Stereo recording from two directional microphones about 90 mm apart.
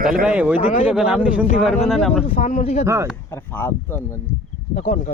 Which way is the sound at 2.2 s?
90° left.